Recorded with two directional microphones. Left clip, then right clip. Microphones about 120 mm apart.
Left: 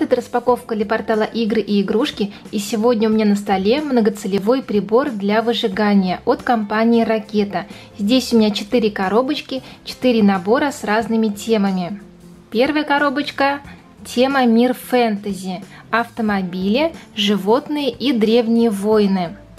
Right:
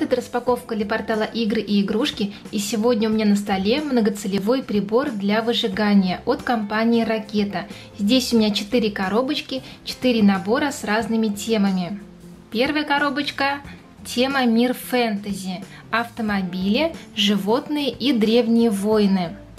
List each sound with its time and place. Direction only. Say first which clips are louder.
0.0 s a woman's voice: left 4 dB; 25° left (ahead or behind)